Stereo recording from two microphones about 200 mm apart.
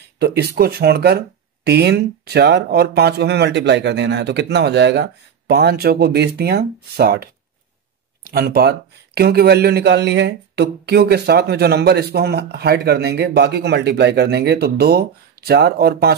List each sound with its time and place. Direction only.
0.2 s speech: 55° right (ahead or behind)